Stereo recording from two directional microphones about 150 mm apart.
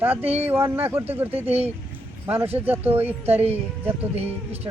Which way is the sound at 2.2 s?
15° right (ahead or behind).